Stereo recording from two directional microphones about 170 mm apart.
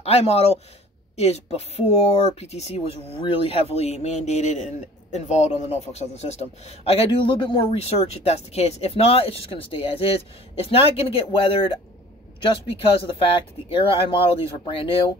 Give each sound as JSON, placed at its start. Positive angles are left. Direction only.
{"t": 0.0, "sound": "a man's voice", "side_deg": 35}